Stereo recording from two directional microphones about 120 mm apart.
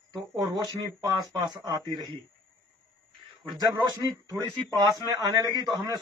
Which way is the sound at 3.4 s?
35° right (ahead or behind).